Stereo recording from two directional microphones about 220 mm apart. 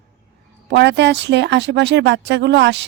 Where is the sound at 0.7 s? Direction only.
50° right (ahead or behind).